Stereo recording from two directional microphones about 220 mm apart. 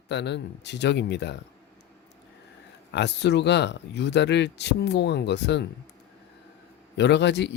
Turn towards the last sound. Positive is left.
turn(degrees=50)  # may be behind; listen again after turning